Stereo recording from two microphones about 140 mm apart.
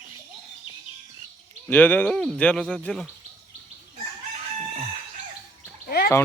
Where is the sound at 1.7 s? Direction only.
10° left (ahead or behind).